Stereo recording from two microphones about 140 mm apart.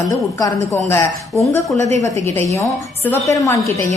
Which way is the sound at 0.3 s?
20° left (ahead or behind).